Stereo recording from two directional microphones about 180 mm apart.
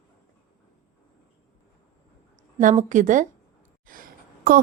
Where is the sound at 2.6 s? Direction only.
45° right (ahead or behind).